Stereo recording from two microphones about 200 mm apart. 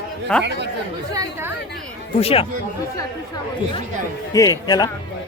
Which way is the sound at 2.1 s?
30° left (ahead or behind).